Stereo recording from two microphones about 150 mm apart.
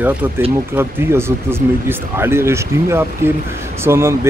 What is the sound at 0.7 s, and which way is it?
Speech, 15° right (ahead or behind).